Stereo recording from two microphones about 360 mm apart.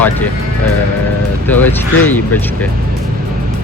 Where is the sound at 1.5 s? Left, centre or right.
Centre.